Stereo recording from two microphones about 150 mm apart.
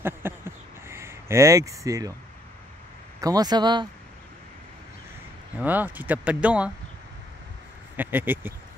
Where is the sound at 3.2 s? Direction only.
25° right (ahead or behind).